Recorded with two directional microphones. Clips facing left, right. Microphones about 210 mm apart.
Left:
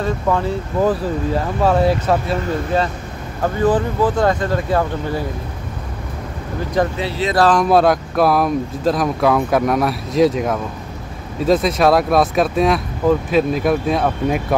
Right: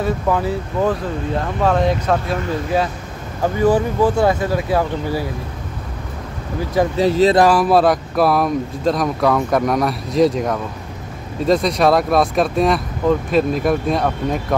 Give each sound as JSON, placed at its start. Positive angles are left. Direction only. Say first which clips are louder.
{"t": 0.0, "sound": "speech", "louder": "even", "side_deg": -5}
{"t": 1.3, "sound": "speech", "louder": "even", "side_deg": 5}
{"t": 3.4, "sound": "speech", "louder": "right 1 dB", "side_deg": -10}
{"t": 7.0, "sound": "speech", "louder": "right 7 dB", "side_deg": -40}
{"t": 7.3, "sound": "speech", "louder": "right 1 dB", "side_deg": -10}